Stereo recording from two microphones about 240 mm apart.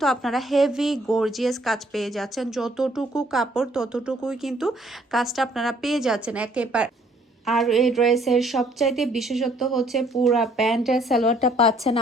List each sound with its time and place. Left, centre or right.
0.0 s a woman's voice: centre
11.3 s a woman's voice: left